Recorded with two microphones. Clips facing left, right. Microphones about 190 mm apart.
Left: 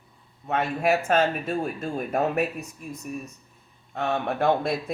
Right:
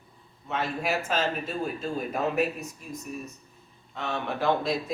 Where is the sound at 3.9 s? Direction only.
55° left (ahead or behind).